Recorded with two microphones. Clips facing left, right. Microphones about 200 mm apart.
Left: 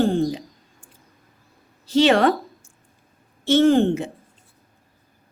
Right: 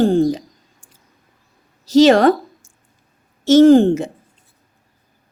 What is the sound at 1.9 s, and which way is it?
Speech, 40° right (ahead or behind).